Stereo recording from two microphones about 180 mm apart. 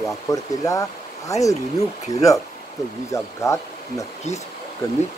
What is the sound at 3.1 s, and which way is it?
Speech, 15° left (ahead or behind).